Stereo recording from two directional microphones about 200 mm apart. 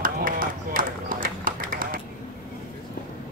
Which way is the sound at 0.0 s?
45° right (ahead or behind).